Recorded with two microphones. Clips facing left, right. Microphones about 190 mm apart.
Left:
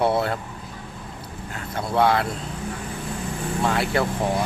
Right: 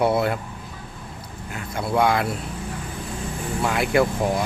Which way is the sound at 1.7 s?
15° right (ahead or behind).